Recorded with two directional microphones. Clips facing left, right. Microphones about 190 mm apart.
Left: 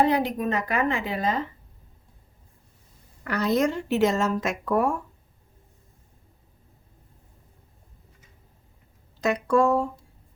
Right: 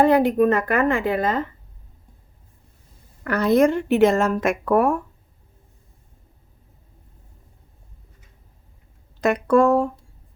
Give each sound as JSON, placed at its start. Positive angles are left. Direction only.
{"t": 0.0, "sound": "a woman's voice", "side_deg": -50}
{"t": 3.2, "sound": "speech", "side_deg": -55}
{"t": 9.2, "sound": "speech", "side_deg": -60}